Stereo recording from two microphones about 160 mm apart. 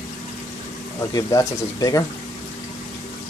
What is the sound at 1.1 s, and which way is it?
Speech, 20° left (ahead or behind).